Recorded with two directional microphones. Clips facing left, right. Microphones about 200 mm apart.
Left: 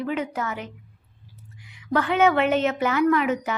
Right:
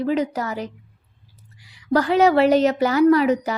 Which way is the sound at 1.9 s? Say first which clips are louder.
Right 4 dB; 35° right (ahead or behind).